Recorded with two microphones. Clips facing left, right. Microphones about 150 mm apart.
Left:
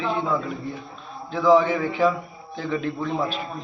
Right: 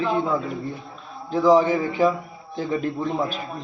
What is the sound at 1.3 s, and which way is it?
Speech, 40° right (ahead or behind).